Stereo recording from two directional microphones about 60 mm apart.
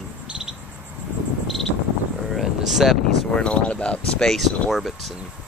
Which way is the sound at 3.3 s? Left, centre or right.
Centre.